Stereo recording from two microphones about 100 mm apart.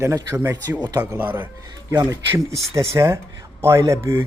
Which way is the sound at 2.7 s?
30° right (ahead or behind).